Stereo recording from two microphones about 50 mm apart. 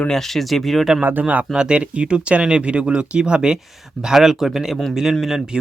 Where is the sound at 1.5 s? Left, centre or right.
Right.